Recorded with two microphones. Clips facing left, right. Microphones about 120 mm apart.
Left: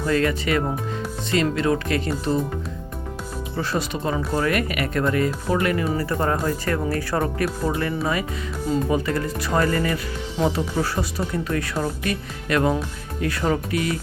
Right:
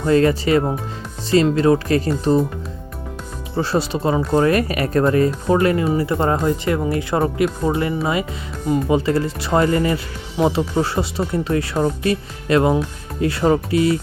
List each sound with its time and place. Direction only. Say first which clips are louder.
0.0 s speech: right 6 dB; 30° right (ahead or behind)
3.5 s speech: right 6 dB; 30° right (ahead or behind)
9.0 s speech: right 5 dB; 30° right (ahead or behind)